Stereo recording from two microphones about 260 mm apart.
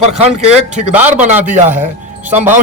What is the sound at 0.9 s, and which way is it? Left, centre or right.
Speech, centre.